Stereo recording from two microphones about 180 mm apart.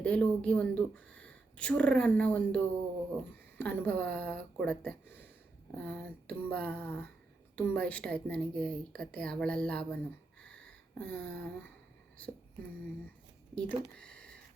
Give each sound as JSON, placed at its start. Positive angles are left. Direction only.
{"t": 0.0, "sound": "speech", "side_deg": 5}
{"t": 3.6, "sound": "speech", "side_deg": 5}
{"t": 10.4, "sound": "a sound", "side_deg": 5}
{"t": 13.6, "sound": "speech", "side_deg": 5}